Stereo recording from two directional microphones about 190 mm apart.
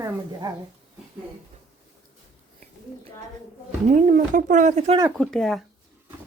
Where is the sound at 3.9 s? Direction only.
40° right (ahead or behind).